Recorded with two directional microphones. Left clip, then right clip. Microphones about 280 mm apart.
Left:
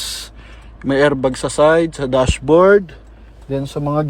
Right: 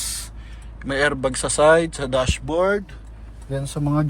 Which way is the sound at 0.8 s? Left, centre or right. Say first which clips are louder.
Left 6 dB; centre.